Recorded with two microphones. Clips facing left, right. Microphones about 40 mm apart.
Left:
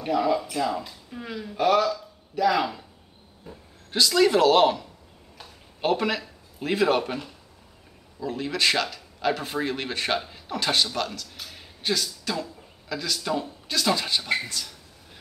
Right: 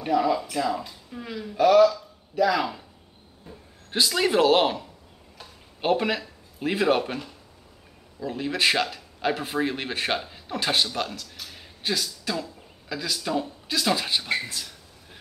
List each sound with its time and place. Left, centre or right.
0.0 s speech: centre
4.1 s speech: centre